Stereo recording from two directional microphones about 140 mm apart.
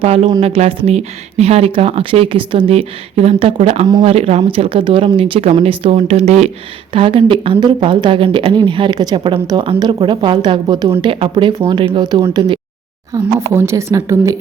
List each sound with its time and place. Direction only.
0.0 s speech: 45° right (ahead or behind)
6.9 s speech: 40° right (ahead or behind)
13.1 s speech: 20° right (ahead or behind)